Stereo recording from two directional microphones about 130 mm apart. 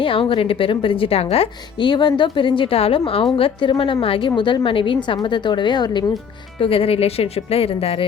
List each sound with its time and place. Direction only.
0.0 s a woman's voice: 45° left (ahead or behind)
6.6 s a woman's voice: 45° left (ahead or behind)